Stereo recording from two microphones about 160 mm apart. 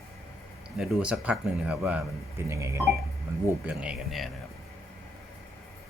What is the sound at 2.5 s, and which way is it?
Speech, 20° right (ahead or behind).